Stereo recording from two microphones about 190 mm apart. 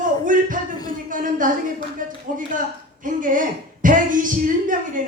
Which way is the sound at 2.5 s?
45° right (ahead or behind).